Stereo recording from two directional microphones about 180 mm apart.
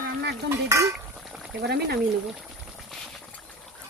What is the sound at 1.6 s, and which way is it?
Speech, 60° right (ahead or behind).